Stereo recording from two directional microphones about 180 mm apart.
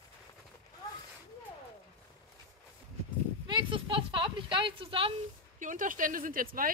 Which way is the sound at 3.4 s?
25° right (ahead or behind).